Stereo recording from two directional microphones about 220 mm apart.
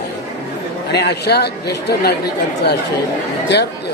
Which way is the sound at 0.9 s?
50° left (ahead or behind).